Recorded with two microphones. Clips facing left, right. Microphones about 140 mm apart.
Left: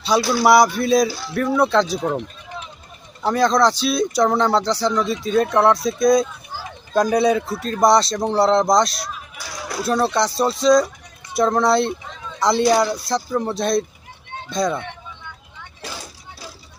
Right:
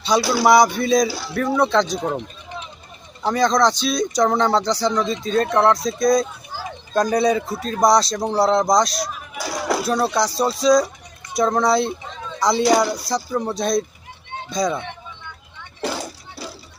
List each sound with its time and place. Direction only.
0.1 s speech: 5° left (ahead or behind)
9.4 s a sound: 90° right
9.8 s speech: centre (ahead or behind)